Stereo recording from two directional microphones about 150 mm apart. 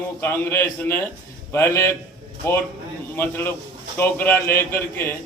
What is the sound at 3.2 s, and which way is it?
A man's voice, 15° left (ahead or behind).